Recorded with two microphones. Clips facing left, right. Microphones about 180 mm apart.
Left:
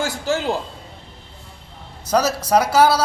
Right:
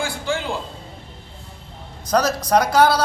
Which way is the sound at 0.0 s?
40° left (ahead or behind).